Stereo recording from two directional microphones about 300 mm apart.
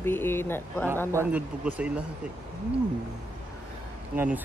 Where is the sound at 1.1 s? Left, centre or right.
Centre.